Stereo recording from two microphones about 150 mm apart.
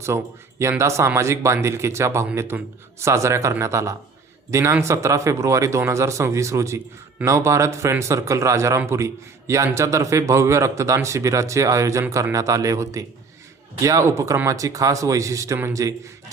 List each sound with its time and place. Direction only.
0.1 s speech: 20° right (ahead or behind)